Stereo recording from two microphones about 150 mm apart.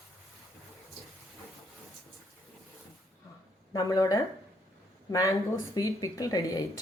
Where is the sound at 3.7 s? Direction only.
25° left (ahead or behind).